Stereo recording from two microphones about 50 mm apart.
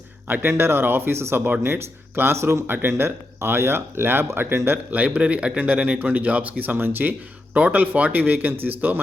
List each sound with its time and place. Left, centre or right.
0.4 s speech: right
2.6 s speech: right
4.9 s a man's voice: right
5.5 s speech: right
7.5 s speech: right